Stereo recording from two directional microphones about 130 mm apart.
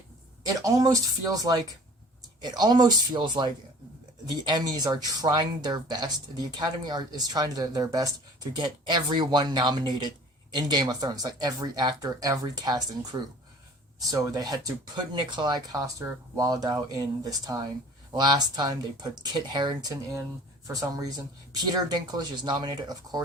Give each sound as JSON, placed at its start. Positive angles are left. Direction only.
{"t": 0.4, "sound": "speech", "side_deg": -25}